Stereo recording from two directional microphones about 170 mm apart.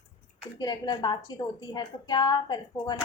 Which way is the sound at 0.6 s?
25° left (ahead or behind).